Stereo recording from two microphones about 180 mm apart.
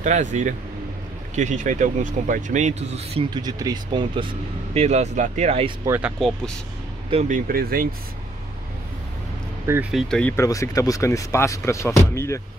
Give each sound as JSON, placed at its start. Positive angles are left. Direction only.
{"t": 0.0, "sound": "speech", "side_deg": -40}
{"t": 3.3, "sound": "speech", "side_deg": -20}
{"t": 4.7, "sound": "speech", "side_deg": -35}
{"t": 5.9, "sound": "speech", "side_deg": -10}
{"t": 6.1, "sound": "speech", "side_deg": 5}
{"t": 7.1, "sound": "speech", "side_deg": -35}
{"t": 7.4, "sound": "speech", "side_deg": -55}
{"t": 9.7, "sound": "speech", "side_deg": -5}